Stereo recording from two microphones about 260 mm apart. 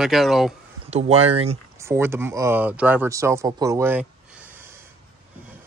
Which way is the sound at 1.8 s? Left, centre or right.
Centre.